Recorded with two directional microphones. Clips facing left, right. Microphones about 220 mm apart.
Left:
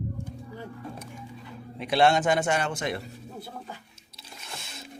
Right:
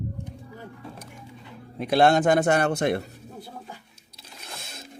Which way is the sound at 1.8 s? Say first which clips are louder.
Right 3 dB; 45° right (ahead or behind).